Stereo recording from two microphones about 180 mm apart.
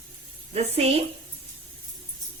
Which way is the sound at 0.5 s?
35° right (ahead or behind).